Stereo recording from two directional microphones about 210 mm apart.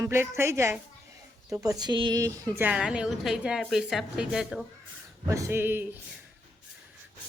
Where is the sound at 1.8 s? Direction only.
20° right (ahead or behind).